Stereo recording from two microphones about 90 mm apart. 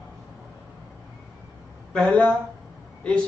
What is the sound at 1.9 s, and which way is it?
Speech, 15° left (ahead or behind).